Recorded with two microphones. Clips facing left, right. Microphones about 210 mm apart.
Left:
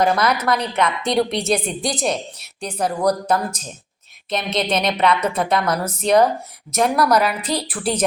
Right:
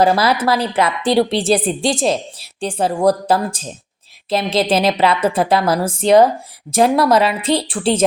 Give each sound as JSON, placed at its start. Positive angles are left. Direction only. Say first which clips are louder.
{"t": 0.0, "sound": "a woman's voice", "louder": "right 4 dB", "side_deg": -30}